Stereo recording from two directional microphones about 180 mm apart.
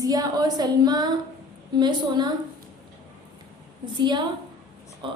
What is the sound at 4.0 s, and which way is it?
A woman's voice, 25° right (ahead or behind).